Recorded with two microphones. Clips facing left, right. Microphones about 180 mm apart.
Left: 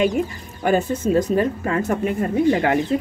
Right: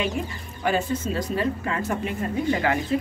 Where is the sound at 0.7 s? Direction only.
45° left (ahead or behind).